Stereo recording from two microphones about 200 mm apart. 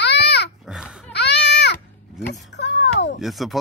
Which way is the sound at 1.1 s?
55° left (ahead or behind).